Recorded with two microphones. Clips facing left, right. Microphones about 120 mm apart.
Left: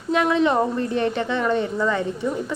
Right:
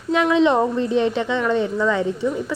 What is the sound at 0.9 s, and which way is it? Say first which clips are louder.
Speech: right 3 dB; 15° right (ahead or behind).